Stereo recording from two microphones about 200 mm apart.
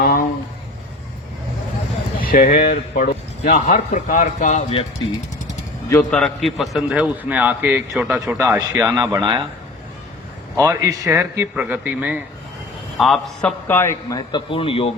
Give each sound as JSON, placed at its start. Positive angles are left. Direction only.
{"t": 0.0, "sound": "a sound", "side_deg": 50}
{"t": 2.2, "sound": "speech", "side_deg": 45}
{"t": 5.9, "sound": "a man's voice", "side_deg": 5}
{"t": 10.6, "sound": "a man's voice", "side_deg": -15}
{"t": 13.7, "sound": "a man's voice", "side_deg": 10}